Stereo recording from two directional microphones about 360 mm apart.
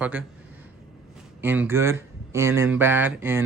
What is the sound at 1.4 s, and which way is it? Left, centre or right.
Speech, centre.